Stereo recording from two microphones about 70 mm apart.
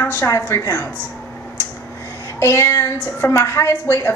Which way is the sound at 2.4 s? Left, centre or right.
Left.